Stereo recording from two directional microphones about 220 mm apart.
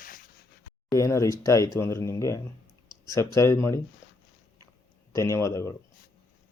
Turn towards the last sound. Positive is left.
turn(degrees=15)  # may be behind; listen again after turning